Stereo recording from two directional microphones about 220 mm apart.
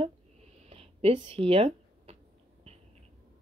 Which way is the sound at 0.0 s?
30° right (ahead or behind).